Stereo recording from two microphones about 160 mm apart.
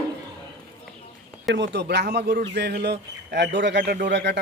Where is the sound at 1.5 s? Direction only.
90° right.